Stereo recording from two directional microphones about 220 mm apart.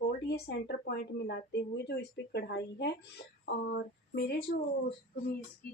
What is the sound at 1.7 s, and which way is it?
Speech, 50° left (ahead or behind).